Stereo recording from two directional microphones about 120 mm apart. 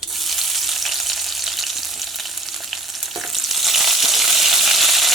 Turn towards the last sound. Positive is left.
turn(degrees=0)  # may be behind; listen again after turning